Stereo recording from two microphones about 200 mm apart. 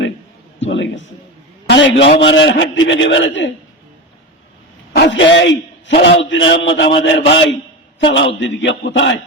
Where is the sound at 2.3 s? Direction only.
65° left (ahead or behind).